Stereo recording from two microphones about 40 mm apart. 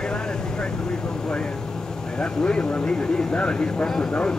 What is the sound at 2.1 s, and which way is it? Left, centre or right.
A man's voice, left.